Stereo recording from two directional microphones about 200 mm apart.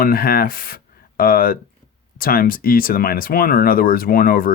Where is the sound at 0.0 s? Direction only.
45° left (ahead or behind).